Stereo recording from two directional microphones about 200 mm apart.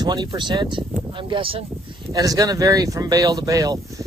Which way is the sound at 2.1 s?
15° right (ahead or behind).